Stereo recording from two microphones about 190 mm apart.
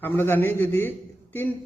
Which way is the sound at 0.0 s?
10° left (ahead or behind).